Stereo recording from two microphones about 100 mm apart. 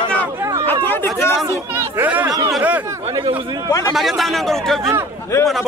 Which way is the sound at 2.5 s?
15° right (ahead or behind).